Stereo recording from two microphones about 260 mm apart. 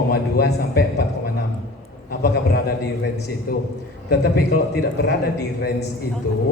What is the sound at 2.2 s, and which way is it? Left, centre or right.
A man's voice, left.